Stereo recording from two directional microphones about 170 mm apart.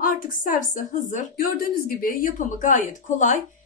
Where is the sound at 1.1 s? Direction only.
55° left (ahead or behind).